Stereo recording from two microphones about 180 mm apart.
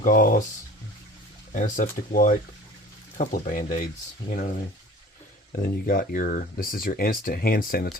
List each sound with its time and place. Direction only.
0.0 s speech: 50° left (ahead or behind)
1.5 s speech: 45° left (ahead or behind)
5.5 s speech: 50° left (ahead or behind)